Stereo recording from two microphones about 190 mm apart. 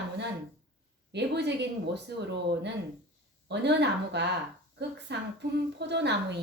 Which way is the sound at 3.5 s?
65° right (ahead or behind).